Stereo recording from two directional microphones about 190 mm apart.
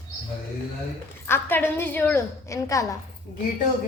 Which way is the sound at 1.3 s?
10° left (ahead or behind).